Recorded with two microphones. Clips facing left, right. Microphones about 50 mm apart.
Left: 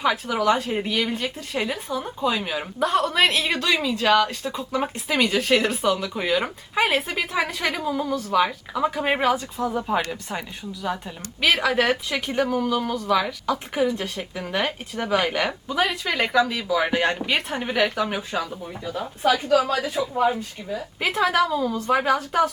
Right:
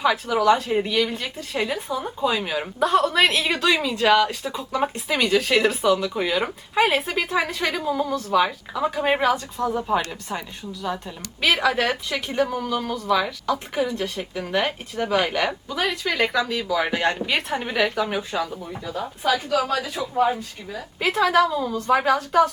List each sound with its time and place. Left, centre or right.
0.0 s a woman's voice: centre
19.6 s a man's voice: left
20.2 s a woman's voice: centre